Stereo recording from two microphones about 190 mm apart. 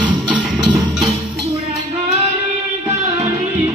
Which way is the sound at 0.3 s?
25° right (ahead or behind).